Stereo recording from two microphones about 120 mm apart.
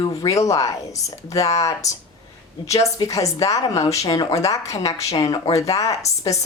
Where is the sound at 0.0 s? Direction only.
30° left (ahead or behind).